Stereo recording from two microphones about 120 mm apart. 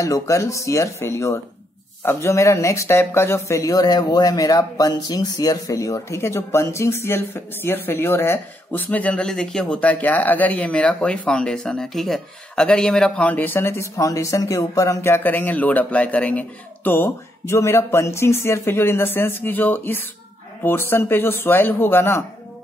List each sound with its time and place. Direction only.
0.0 s speech: 25° left (ahead or behind)